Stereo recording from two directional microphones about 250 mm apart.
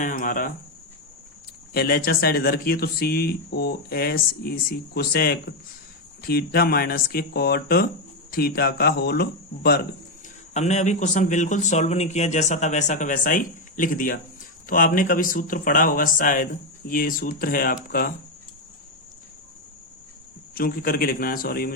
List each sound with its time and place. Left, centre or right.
0.0 s speech: left
1.7 s speech: left
10.5 s speech: left
20.6 s speech: left